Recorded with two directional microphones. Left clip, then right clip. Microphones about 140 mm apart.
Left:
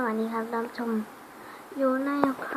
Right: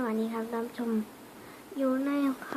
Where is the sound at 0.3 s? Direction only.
15° right (ahead or behind).